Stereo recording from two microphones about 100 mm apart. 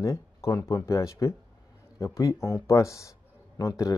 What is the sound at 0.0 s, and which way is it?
A man's voice, 30° left (ahead or behind).